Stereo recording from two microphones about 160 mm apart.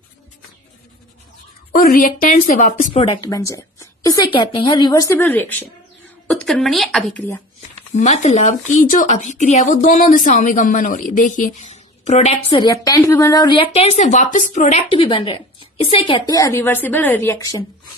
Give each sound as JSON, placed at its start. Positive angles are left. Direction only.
{"t": 1.7, "sound": "a woman's voice", "side_deg": 60}
{"t": 3.2, "sound": "a woman's voice", "side_deg": 20}
{"t": 5.1, "sound": "a woman's voice", "side_deg": 15}
{"t": 7.9, "sound": "speech", "side_deg": 45}
{"t": 12.7, "sound": "a woman's voice", "side_deg": 20}
{"t": 13.7, "sound": "speech", "side_deg": 40}
{"t": 14.8, "sound": "a woman's voice", "side_deg": 35}